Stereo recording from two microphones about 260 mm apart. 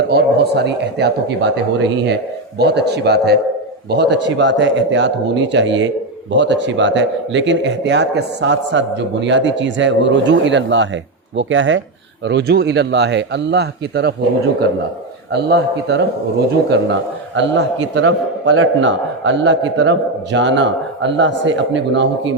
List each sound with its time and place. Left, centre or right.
0.1 s a man's voice: right
2.6 s a man's voice: right
15.3 s a man's voice: right